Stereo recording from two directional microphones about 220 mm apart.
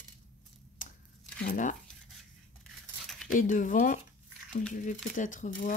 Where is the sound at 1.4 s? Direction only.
35° left (ahead or behind).